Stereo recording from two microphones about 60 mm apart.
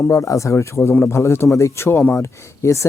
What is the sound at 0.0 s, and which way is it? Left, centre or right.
Speech, left.